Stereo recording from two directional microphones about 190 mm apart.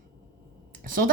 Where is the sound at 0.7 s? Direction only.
45° right (ahead or behind).